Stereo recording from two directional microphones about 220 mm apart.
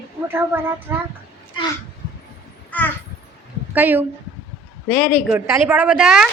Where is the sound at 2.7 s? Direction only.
5° left (ahead or behind).